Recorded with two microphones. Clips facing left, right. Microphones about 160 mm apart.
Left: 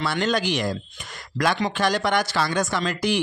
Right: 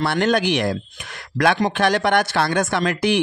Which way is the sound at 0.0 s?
60° right (ahead or behind).